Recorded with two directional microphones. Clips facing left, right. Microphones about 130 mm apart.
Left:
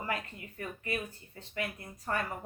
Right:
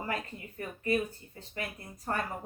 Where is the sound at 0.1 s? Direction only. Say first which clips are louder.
Right 1 dB; 35° right (ahead or behind).